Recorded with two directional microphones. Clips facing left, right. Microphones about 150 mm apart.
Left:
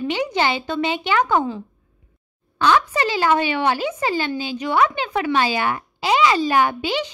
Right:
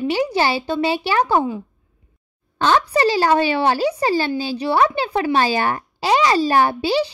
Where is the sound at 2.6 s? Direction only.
40° right (ahead or behind).